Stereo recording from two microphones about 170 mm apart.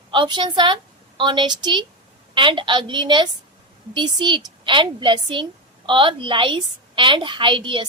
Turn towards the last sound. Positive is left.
turn(degrees=-30)  # may be behind; listen again after turning